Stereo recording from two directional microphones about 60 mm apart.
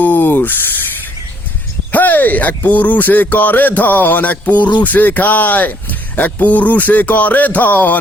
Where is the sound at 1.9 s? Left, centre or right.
Left.